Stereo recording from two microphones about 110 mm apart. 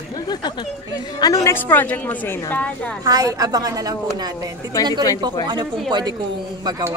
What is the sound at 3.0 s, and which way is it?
Speech, 35° right (ahead or behind).